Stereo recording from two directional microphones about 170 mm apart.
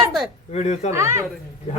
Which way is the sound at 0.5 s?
40° left (ahead or behind).